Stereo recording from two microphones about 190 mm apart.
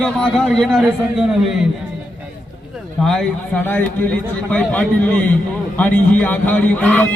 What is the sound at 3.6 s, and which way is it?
Speech, 10° left (ahead or behind).